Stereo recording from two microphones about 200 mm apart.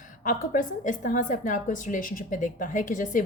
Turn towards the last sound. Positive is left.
turn(degrees=40)  # may be behind; listen again after turning